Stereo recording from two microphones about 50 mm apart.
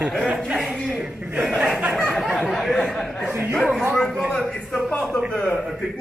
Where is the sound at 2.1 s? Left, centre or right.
Centre.